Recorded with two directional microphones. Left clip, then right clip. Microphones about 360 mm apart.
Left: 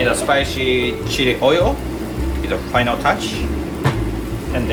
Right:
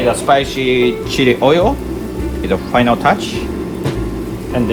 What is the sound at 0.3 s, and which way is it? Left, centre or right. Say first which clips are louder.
Speech: right 4 dB; centre.